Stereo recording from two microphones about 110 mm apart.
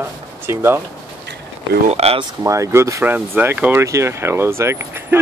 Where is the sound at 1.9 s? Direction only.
65° right (ahead or behind).